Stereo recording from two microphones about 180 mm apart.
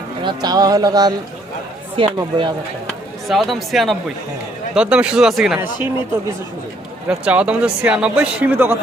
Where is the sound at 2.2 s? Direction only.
25° right (ahead or behind).